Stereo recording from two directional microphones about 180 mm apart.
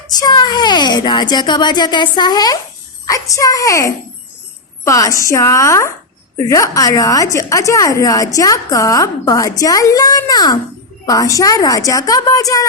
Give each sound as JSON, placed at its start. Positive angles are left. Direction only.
{"t": 0.1, "sound": "a woman's voice", "side_deg": 20}